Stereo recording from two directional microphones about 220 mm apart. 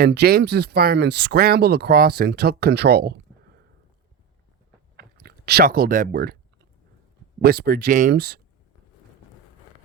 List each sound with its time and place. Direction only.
0.0 s speech: 45° right (ahead or behind)
4.9 s a sound: 45° right (ahead or behind)
7.4 s speech: 45° right (ahead or behind)